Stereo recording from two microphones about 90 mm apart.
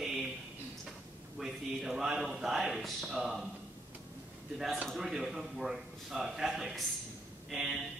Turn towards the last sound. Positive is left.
turn(degrees=-5)  # may be behind; listen again after turning